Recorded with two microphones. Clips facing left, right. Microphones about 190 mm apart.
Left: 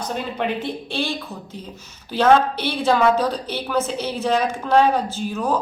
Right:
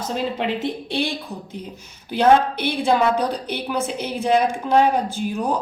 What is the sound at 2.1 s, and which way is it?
A woman's voice, 15° right (ahead or behind).